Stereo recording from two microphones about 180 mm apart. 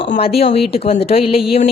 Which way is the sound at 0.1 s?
35° left (ahead or behind).